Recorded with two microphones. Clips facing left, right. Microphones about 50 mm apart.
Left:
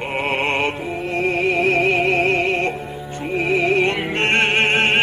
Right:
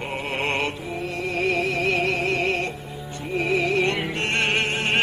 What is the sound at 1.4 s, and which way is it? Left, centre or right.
Music, left.